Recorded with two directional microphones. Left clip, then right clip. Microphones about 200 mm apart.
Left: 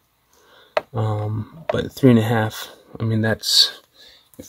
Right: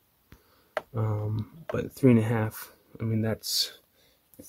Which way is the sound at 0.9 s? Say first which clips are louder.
Left 8 dB; 15° right (ahead or behind).